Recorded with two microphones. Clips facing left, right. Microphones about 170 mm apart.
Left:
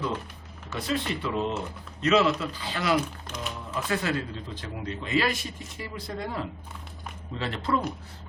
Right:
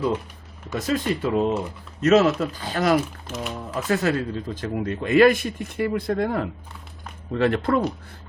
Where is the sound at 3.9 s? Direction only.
45° right (ahead or behind).